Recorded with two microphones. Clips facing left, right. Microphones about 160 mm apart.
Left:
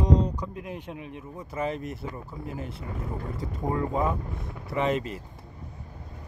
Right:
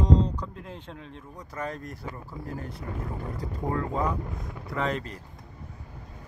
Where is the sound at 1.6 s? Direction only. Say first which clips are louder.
Left 5 dB; 10° left (ahead or behind).